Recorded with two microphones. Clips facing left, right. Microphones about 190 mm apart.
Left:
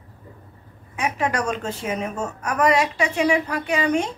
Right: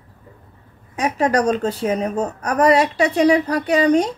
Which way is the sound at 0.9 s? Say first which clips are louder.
Right 6 dB; 40° right (ahead or behind).